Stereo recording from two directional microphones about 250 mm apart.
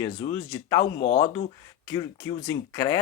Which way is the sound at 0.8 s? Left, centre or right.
Left.